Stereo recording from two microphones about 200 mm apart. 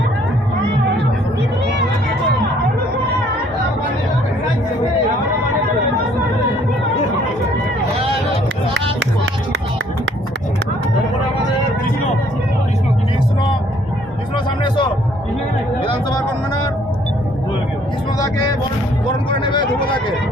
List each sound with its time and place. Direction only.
8.7 s music: 60° right (ahead or behind)
14.3 s music: 25° left (ahead or behind)
19.3 s a sound: 25° left (ahead or behind)